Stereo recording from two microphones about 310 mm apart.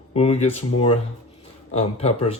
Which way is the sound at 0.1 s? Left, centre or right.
Centre.